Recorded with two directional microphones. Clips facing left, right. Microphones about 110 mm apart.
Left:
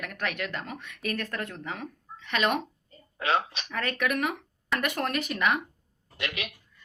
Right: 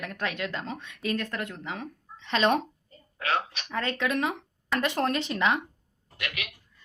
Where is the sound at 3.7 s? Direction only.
25° right (ahead or behind).